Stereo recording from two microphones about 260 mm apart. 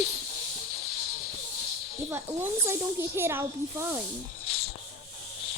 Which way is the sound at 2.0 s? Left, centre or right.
Centre.